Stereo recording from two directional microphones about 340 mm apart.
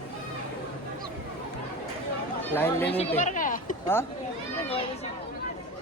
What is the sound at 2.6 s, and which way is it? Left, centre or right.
Speech, centre.